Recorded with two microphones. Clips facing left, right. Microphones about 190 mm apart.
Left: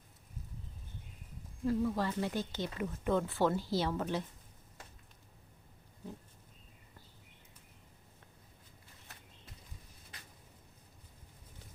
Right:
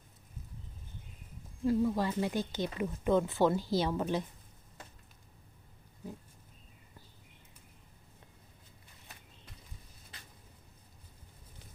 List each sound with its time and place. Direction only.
1.6 s speech: 15° right (ahead or behind)